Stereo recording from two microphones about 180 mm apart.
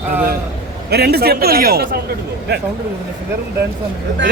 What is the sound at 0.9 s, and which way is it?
A man's voice, 60° right (ahead or behind).